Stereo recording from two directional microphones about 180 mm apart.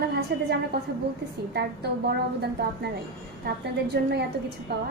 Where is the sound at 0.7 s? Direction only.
60° right (ahead or behind).